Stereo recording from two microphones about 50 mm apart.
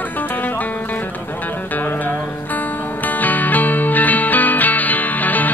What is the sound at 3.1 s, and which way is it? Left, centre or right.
Music, left.